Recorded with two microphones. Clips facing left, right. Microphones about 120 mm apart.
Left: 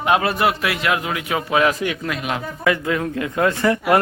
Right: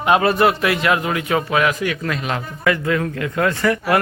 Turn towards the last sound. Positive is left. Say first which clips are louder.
# left 1 dB
turn(degrees=25)  # may be behind; listen again after turning